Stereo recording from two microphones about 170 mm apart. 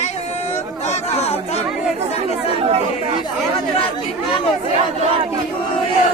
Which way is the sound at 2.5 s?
35° right (ahead or behind).